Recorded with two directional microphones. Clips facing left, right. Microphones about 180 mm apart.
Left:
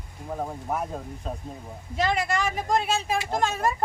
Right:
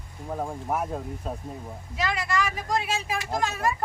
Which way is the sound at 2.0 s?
25° left (ahead or behind).